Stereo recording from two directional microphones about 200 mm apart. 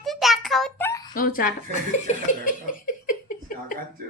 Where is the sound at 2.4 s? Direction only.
45° left (ahead or behind).